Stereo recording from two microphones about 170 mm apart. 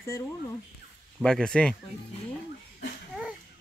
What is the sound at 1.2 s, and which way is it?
Speech, 5° left (ahead or behind).